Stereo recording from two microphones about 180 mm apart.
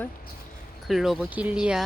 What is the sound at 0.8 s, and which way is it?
Speech, centre (ahead or behind).